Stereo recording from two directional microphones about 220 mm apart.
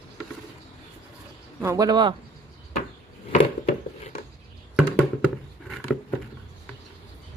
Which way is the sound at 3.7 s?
30° left (ahead or behind).